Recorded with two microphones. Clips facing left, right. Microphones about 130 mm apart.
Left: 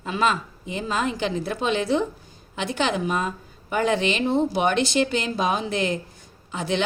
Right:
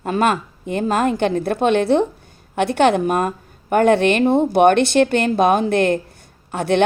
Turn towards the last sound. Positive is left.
turn(degrees=-60)  # may be behind; listen again after turning